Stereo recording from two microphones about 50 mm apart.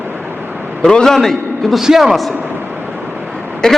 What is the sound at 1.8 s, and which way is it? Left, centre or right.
Speech, centre.